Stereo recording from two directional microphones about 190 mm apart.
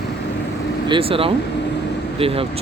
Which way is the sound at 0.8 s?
25° right (ahead or behind).